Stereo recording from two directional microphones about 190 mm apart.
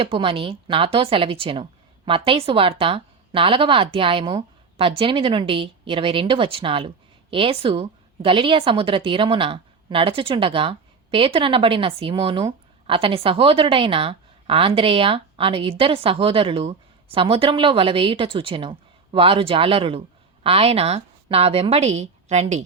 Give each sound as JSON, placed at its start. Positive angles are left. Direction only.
{"t": 0.0, "sound": "a woman's voice", "side_deg": -30}